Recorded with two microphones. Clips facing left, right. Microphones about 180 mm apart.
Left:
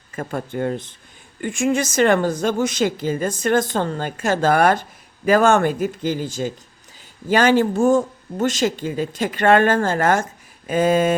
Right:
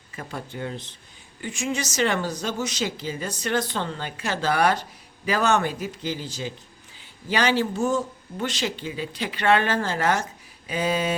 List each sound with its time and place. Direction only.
0.1 s speech: 50° left (ahead or behind)